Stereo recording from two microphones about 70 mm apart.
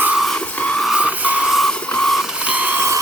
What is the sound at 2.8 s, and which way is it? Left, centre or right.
Steam, right.